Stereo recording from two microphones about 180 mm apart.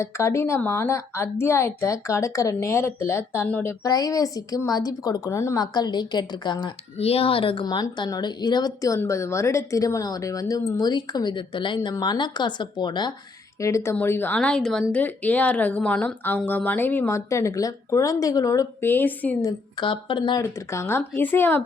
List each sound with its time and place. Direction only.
0.0 s a woman's voice: 15° left (ahead or behind)
19.5 s speech: 25° left (ahead or behind); by 21.6 s 10° left (ahead or behind)